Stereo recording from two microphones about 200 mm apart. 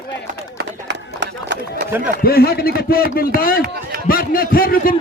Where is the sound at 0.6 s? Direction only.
60° right (ahead or behind).